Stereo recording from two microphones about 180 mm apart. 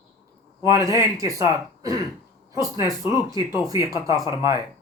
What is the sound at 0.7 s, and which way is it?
Speech, 20° right (ahead or behind).